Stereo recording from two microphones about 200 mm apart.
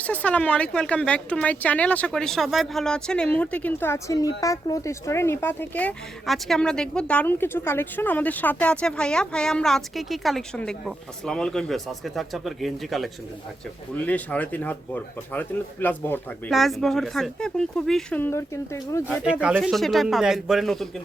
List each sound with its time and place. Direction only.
0.0 s speech: 5° left (ahead or behind)
19.0 s speech: 5° right (ahead or behind)